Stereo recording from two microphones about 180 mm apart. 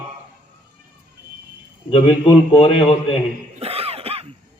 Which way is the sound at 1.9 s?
25° left (ahead or behind).